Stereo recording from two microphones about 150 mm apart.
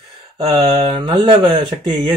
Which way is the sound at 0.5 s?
25° right (ahead or behind).